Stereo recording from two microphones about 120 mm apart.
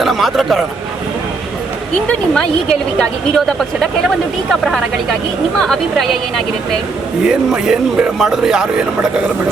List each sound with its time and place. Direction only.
0.0 s a man's voice: centre (ahead or behind)
2.0 s a man's voice: 5° left (ahead or behind)
5.5 s a man's voice: 5° left (ahead or behind)